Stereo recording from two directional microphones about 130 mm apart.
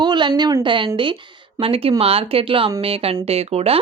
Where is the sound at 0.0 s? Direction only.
35° right (ahead or behind).